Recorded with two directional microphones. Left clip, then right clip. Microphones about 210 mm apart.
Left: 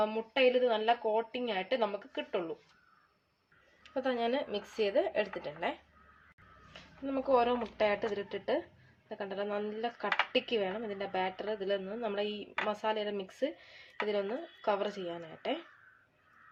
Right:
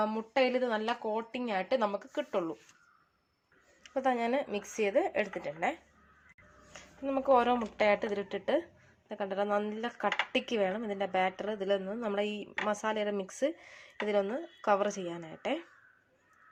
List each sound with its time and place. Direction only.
0.0 s speech: 35° right (ahead or behind)
3.9 s a woman's voice: 25° right (ahead or behind)
7.0 s a woman's voice: 30° right (ahead or behind)